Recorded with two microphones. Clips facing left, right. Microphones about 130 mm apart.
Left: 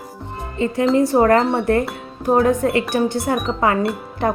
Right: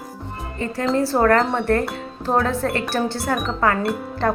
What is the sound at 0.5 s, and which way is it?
Speech, 20° left (ahead or behind).